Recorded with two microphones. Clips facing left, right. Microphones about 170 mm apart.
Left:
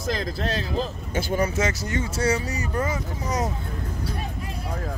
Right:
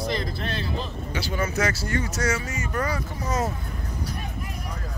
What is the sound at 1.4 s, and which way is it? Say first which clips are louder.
Speech: right 1 dB; 20° left (ahead or behind).